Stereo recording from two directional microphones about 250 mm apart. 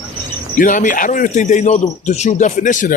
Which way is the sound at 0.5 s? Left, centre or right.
Left.